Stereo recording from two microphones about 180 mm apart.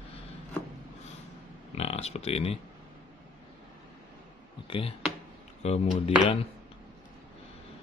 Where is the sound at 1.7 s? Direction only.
35° left (ahead or behind).